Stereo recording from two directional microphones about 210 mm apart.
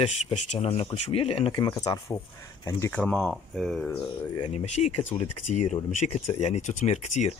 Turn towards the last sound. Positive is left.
turn(degrees=35)  # may be behind; listen again after turning